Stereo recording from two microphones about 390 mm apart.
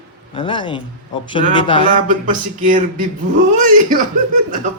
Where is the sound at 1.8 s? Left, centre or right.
Centre.